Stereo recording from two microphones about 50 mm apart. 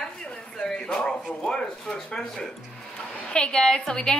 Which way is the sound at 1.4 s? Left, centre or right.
Centre.